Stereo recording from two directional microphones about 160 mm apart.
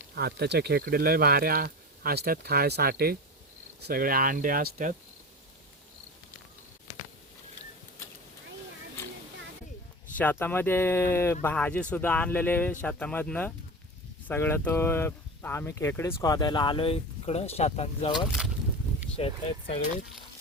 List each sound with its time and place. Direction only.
0.2 s speech: 85° right; by 4.9 s 60° right (ahead or behind)
10.2 s speech: 10° left (ahead or behind); by 18.1 s 40° left (ahead or behind)
18.1 s speech: centre (ahead or behind)
19.2 s speech: 40° left (ahead or behind)